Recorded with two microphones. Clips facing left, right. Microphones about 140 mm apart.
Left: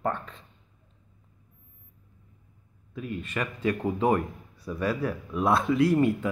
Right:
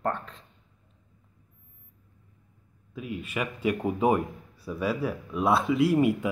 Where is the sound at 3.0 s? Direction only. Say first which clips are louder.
Even; 5° right (ahead or behind).